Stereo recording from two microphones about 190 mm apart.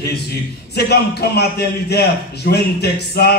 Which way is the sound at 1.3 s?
60° left (ahead or behind).